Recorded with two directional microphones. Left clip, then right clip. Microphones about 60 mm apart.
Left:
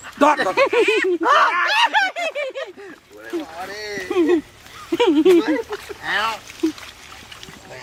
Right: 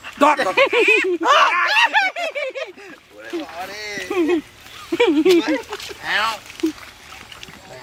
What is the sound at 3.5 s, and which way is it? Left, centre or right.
Speech, right.